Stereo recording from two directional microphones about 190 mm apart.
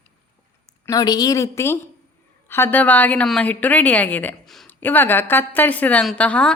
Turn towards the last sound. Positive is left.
turn(degrees=5)  # may be behind; listen again after turning